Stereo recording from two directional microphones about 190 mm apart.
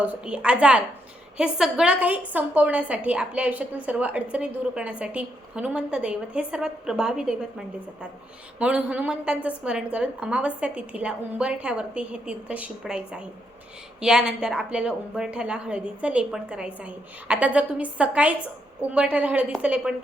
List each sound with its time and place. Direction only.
0.0 s a woman's voice: 5° right (ahead or behind)
8.5 s a woman's voice: 5° right (ahead or behind)